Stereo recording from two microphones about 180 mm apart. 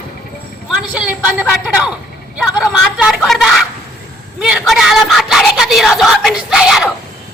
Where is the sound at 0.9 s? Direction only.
5° right (ahead or behind).